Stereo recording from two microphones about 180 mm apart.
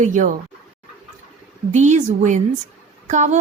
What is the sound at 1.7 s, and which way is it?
A woman's voice, 40° right (ahead or behind).